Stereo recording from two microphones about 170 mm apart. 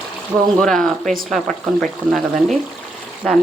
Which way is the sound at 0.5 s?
5° left (ahead or behind).